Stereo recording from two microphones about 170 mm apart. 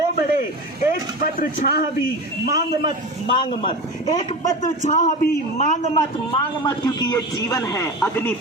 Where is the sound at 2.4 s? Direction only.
20° right (ahead or behind).